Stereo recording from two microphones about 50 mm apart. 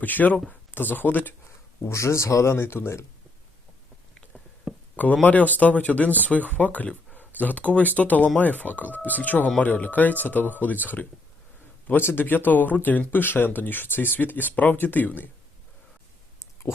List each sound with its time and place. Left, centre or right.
0.0 s speech: left
1.8 s speech: left
4.7 s a sound: centre
5.2 s speech: left
11.9 s speech: left